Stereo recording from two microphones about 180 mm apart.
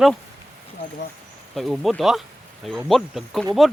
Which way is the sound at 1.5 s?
Centre (ahead or behind).